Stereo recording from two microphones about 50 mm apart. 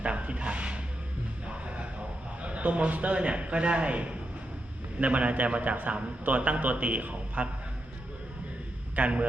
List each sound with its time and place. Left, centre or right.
0.0 s a sound: right
1.5 s music: right
2.4 s a man's voice: right
9.0 s a man's voice: right